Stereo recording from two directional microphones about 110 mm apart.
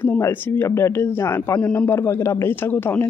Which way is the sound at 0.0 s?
20° left (ahead or behind).